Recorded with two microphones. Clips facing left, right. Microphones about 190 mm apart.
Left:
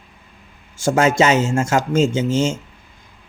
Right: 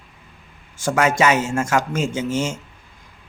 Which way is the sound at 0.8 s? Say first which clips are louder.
Left 3 dB; 25° left (ahead or behind).